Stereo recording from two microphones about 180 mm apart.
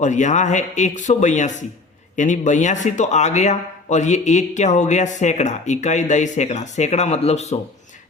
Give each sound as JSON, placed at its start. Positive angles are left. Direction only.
{"t": 0.0, "sound": "speech", "side_deg": 40}